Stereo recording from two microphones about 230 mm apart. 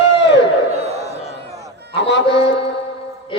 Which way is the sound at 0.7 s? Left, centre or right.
Right.